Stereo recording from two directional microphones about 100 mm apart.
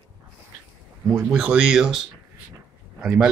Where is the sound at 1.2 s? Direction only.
10° right (ahead or behind).